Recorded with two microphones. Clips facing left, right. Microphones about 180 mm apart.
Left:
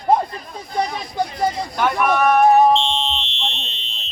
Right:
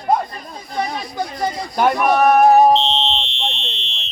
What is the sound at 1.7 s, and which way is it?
Speech, 40° right (ahead or behind).